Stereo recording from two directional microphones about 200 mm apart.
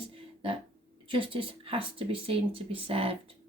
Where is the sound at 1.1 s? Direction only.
25° right (ahead or behind).